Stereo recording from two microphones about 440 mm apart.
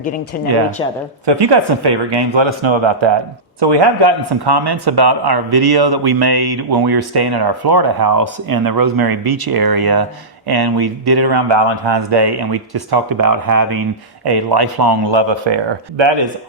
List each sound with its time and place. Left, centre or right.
0.3 s speech: centre
1.2 s speech: right
3.6 s speech: right
14.3 s speech: right